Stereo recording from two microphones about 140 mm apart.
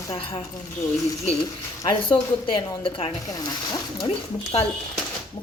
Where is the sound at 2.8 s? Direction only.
40° left (ahead or behind).